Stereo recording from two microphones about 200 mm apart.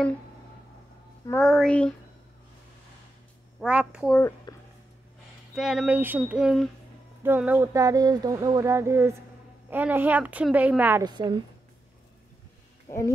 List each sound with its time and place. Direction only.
1.4 s speech: centre (ahead or behind)
3.6 s speech: 5° right (ahead or behind)
4.5 s a sound: 20° left (ahead or behind)
5.5 s speech: 5° right (ahead or behind)
7.2 s a sound: 10° right (ahead or behind)
11.1 s a woman's voice: 20° right (ahead or behind)
12.8 s speech: 15° left (ahead or behind)